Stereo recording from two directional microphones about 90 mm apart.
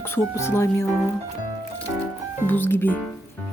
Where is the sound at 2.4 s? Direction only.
25° left (ahead or behind).